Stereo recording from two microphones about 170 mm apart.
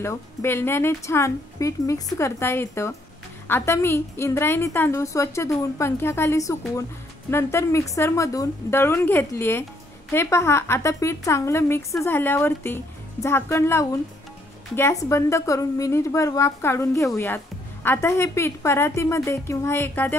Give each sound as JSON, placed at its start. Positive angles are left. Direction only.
{"t": 0.0, "sound": "a woman's voice", "side_deg": 15}